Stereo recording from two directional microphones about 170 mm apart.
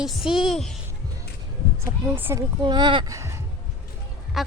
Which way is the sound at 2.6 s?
25° right (ahead or behind).